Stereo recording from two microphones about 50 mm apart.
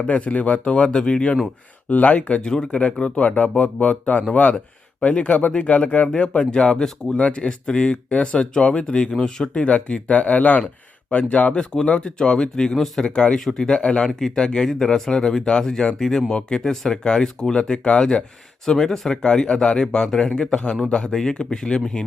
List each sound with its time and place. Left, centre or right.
0.0 s speech: left
0.9 s speech: centre